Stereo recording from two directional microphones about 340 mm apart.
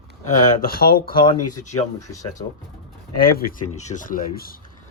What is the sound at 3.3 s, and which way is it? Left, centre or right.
Speech, left.